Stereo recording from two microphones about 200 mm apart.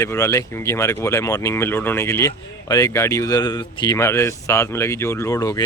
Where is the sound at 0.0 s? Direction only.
15° left (ahead or behind).